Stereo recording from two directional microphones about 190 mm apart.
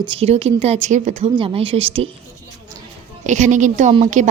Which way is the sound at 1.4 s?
30° right (ahead or behind).